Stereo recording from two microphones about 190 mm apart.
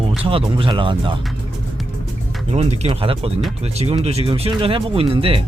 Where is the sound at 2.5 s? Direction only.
35° right (ahead or behind).